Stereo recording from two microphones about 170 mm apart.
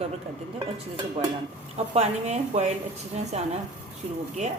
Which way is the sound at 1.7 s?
40° right (ahead or behind).